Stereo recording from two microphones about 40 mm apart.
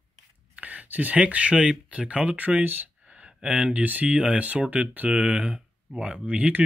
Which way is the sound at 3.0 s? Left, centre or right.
Right.